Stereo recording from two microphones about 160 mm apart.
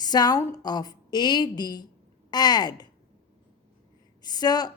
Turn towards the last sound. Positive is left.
turn(degrees=25)  # may be behind; listen again after turning